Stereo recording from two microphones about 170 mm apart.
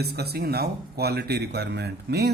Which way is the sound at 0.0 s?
70° right (ahead or behind).